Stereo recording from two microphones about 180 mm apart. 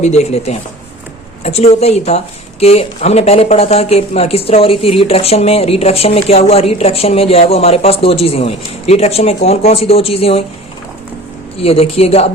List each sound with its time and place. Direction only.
0.0 s speech: 40° left (ahead or behind)
11.5 s speech: 30° left (ahead or behind)